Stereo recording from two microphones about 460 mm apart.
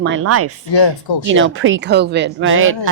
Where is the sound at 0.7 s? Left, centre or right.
Left.